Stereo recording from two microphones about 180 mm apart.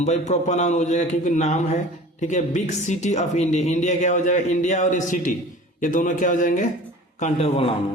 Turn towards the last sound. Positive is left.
turn(degrees=35)  # may be behind; listen again after turning